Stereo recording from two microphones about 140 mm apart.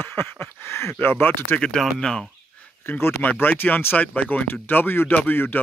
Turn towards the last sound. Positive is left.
turn(degrees=15)  # may be behind; listen again after turning